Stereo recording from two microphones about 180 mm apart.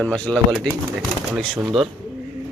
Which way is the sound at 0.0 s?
5° left (ahead or behind).